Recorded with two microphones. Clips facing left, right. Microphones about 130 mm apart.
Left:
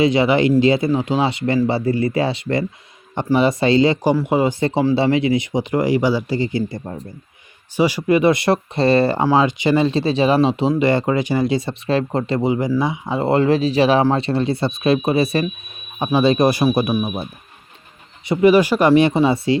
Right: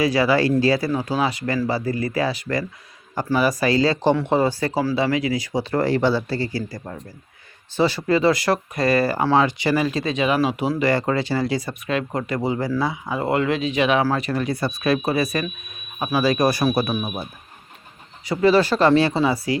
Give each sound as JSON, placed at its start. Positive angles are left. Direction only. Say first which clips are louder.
{"t": 0.0, "sound": "speech", "louder": "left 3 dB", "side_deg": 20}
{"t": 4.0, "sound": "speech", "louder": "left 2 dB", "side_deg": 10}
{"t": 4.6, "sound": "speech", "louder": "left 5 dB", "side_deg": 25}
{"t": 7.8, "sound": "speech", "louder": "left 3 dB", "side_deg": 15}
{"t": 18.3, "sound": "speech", "louder": "left 4 dB", "side_deg": 15}